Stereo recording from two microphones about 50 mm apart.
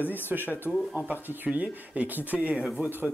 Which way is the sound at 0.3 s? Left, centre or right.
Right.